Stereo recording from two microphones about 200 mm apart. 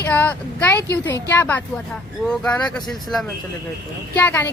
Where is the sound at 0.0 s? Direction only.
10° left (ahead or behind).